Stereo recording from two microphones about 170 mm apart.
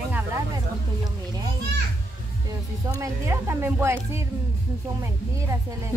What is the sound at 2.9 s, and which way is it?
A woman's voice, 20° right (ahead or behind).